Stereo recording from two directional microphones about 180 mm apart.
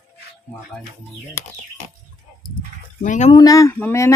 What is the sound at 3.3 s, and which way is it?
Speech, 20° left (ahead or behind).